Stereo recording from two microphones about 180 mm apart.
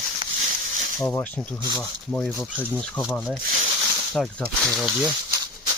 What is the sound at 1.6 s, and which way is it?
Speech, 20° right (ahead or behind).